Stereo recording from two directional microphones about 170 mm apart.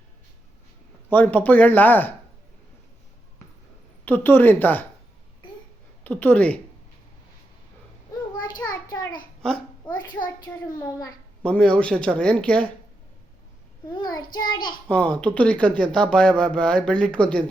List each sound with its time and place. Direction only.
1.1 s speech: 10° left (ahead or behind)
4.0 s speech: 10° left (ahead or behind)
6.1 s speech: 10° left (ahead or behind)
8.4 s child singing: 25° left (ahead or behind)
9.4 s babbling: 5° left (ahead or behind)
11.4 s speech: 5° left (ahead or behind)
13.9 s child singing: 25° left (ahead or behind)
14.8 s speech: 5° left (ahead or behind)